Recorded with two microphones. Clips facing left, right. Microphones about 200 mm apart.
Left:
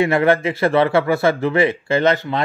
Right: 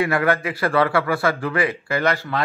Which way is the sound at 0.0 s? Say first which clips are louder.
Left 5 dB; 25° left (ahead or behind).